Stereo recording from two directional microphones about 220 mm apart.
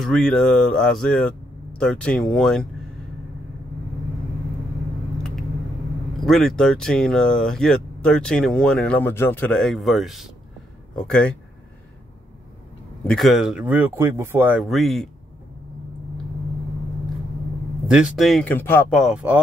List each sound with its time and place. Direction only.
0.0 s speech: centre (ahead or behind)
6.2 s speech: centre (ahead or behind)
13.0 s speech: centre (ahead or behind)
17.8 s speech: 5° right (ahead or behind)